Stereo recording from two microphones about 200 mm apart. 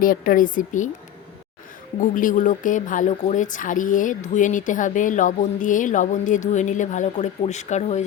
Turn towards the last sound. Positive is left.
turn(degrees=35)  # may be behind; listen again after turning